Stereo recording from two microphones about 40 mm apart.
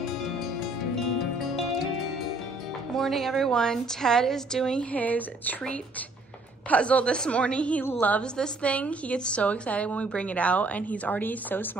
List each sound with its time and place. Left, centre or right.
0.9 s music: centre
2.9 s a woman's voice: centre
4.9 s a woman's voice: left
7.1 s a woman's voice: left
8.0 s a woman's voice: left